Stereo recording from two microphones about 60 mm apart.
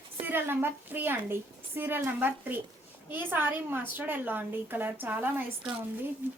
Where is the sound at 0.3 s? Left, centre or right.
Right.